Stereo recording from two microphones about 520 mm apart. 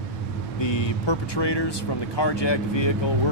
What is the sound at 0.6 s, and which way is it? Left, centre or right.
Speech, left.